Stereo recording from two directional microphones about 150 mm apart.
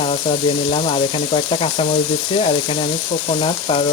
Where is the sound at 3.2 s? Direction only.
40° left (ahead or behind).